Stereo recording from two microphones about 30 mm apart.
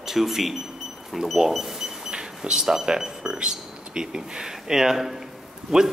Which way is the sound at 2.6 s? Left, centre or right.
Centre.